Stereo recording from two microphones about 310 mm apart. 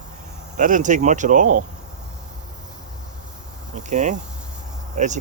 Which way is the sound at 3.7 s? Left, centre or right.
Right.